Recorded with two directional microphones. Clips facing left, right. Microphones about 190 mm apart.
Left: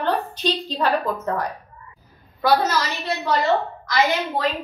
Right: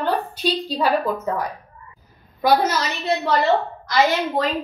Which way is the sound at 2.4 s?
20° right (ahead or behind).